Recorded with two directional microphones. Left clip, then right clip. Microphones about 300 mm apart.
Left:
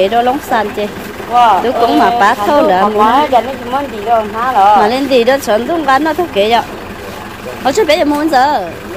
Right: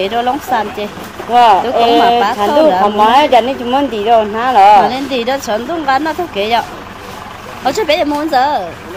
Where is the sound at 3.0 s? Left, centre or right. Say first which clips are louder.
Right 1 dB; right.